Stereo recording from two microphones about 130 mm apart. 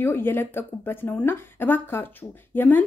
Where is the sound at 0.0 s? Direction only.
15° left (ahead or behind).